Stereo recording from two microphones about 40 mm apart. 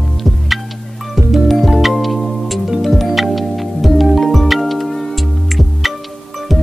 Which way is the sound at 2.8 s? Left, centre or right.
Centre.